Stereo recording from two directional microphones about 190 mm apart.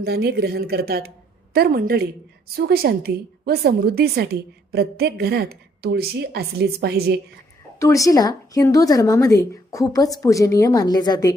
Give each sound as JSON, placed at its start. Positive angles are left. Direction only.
{"t": 0.0, "sound": "a woman's voice", "side_deg": -55}
{"t": 7.8, "sound": "speech", "side_deg": 15}